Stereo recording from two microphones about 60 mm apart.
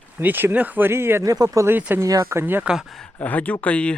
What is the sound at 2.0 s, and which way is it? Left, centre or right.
Speech, right.